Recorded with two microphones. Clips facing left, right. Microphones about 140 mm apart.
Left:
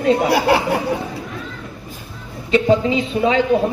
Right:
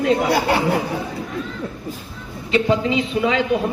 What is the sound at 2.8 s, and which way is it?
Speech, 35° left (ahead or behind).